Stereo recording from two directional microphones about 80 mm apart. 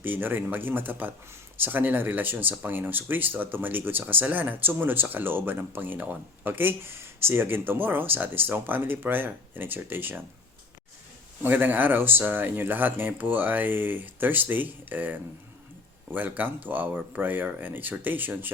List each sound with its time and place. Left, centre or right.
0.0 s speech: right
11.4 s speech: right